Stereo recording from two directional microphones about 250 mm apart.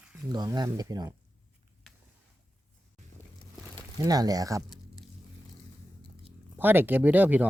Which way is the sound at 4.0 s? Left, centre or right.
Centre.